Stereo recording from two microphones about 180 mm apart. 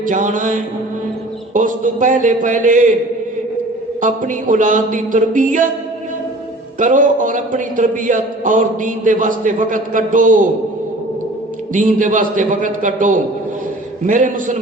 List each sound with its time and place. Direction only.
0.0 s a man's voice: 45° right (ahead or behind)
4.0 s a man's voice: 45° right (ahead or behind)
6.7 s a man's voice: 45° right (ahead or behind)
11.7 s a man's voice: 45° right (ahead or behind)